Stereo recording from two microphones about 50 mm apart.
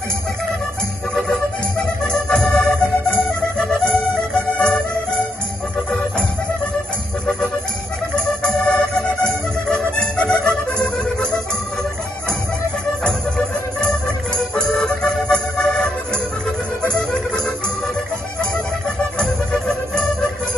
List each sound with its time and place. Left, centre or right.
2.0 s music: centre
8.4 s music: centre
13.7 s music: centre
19.1 s music: centre